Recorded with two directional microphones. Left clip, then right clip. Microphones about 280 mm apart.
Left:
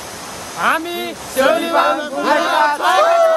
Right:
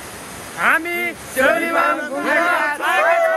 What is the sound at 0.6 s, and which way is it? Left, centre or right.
Speech, centre.